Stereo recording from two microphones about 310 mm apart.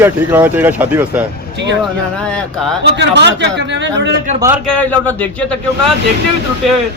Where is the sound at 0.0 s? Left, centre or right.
Centre.